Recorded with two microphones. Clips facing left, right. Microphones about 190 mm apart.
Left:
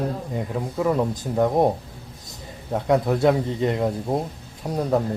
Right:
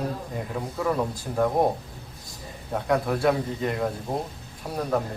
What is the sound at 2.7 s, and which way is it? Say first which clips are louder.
A man's voice: left 4 dB; 20° left (ahead or behind).